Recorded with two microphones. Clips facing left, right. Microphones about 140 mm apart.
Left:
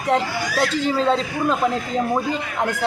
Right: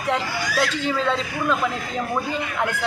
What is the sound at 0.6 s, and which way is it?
A woman's voice, 35° left (ahead or behind).